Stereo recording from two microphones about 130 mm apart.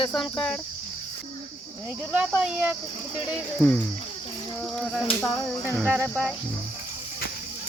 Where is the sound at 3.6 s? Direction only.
Centre (ahead or behind).